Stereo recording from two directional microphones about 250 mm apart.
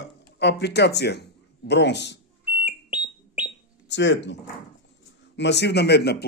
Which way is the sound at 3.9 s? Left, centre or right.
Left.